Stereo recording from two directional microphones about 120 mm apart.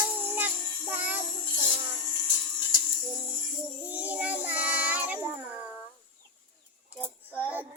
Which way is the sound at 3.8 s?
15° right (ahead or behind).